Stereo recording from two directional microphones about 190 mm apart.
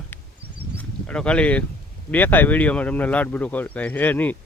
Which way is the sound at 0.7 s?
5° left (ahead or behind).